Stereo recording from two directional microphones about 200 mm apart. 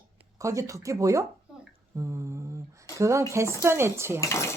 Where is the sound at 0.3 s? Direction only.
15° right (ahead or behind).